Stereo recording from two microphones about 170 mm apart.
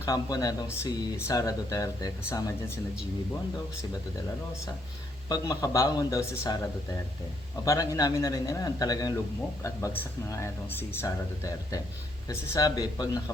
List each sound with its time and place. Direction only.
0.0 s speech: 20° left (ahead or behind)
5.3 s speech: 20° left (ahead or behind)
7.6 s speech: 20° left (ahead or behind)